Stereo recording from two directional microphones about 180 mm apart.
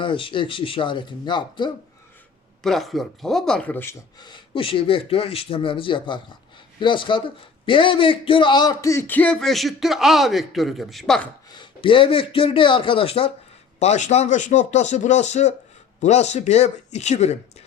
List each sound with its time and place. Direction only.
0.0 s speech: 30° left (ahead or behind)
2.6 s speech: centre (ahead or behind)
4.2 s speech: 25° left (ahead or behind); by 11.3 s centre (ahead or behind)
11.5 s a man's voice: 25° left (ahead or behind)